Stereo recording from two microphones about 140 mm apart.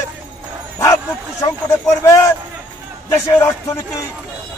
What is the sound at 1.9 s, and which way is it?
Speech, 20° left (ahead or behind).